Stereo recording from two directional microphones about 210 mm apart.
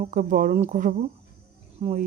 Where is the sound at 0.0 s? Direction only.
35° right (ahead or behind).